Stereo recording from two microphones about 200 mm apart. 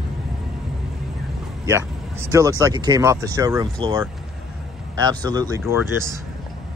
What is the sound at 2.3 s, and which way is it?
Speech, 15° right (ahead or behind).